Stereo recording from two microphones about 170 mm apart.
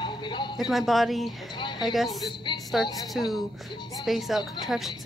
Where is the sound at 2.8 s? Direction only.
25° left (ahead or behind).